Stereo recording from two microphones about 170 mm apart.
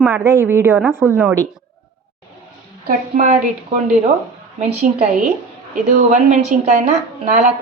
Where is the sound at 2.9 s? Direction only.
45° right (ahead or behind).